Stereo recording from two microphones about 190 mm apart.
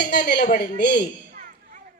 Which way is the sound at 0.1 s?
55° left (ahead or behind).